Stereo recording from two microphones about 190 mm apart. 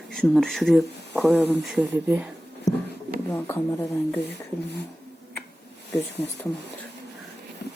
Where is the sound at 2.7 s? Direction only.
20° left (ahead or behind).